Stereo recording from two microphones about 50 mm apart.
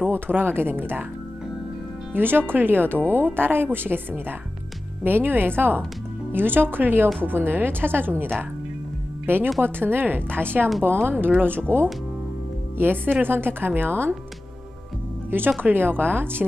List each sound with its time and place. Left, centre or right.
0.1 s speech: right
2.1 s speech: right
15.6 s speech: right